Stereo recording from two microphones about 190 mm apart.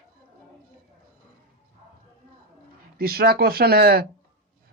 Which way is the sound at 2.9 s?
55° right (ahead or behind).